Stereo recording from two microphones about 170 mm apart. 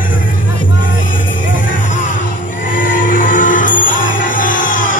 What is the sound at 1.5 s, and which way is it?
Music, 50° left (ahead or behind).